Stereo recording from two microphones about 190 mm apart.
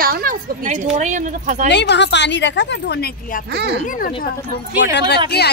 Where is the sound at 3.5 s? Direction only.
60° right (ahead or behind).